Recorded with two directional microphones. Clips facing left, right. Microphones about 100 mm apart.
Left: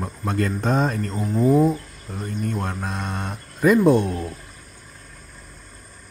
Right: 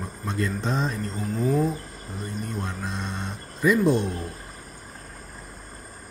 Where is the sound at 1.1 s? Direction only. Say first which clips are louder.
Left 7 dB; 40° left (ahead or behind).